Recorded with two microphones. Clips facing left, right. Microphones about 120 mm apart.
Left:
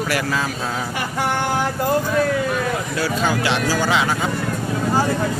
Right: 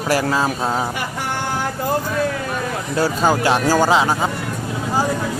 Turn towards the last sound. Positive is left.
turn(degrees=-35)  # may be behind; listen again after turning